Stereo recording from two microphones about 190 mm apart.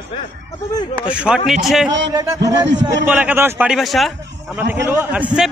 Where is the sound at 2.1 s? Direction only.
20° right (ahead or behind); by 4.1 s centre (ahead or behind).